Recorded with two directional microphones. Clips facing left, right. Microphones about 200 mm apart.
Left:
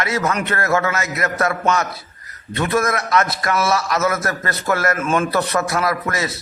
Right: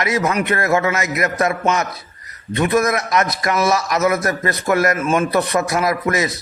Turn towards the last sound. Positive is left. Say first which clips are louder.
# right 3 dB
turn(degrees=-15)  # may be behind; listen again after turning